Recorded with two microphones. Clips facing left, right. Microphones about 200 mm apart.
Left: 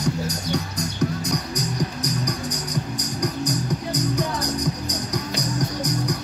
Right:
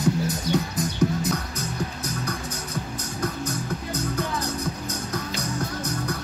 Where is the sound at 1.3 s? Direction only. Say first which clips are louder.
Left 2 dB; 15° left (ahead or behind).